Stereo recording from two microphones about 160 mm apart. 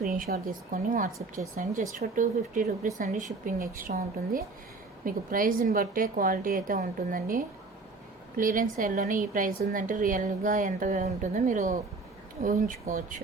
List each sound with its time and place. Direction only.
0.0 s a woman's voice: 65° right (ahead or behind)